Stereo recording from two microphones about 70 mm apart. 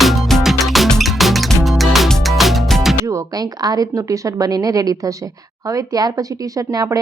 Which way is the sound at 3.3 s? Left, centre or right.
Right.